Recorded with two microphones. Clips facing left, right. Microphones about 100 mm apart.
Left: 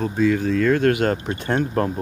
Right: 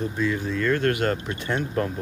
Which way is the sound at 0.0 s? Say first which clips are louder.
Left 6 dB; 85° left.